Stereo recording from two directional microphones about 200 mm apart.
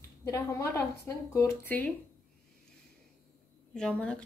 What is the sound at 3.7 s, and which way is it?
Speech, 5° left (ahead or behind).